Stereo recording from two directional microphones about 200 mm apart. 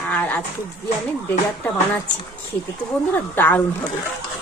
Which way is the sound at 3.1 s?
10° left (ahead or behind).